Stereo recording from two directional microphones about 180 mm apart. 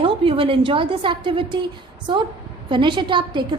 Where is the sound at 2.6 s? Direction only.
25° right (ahead or behind).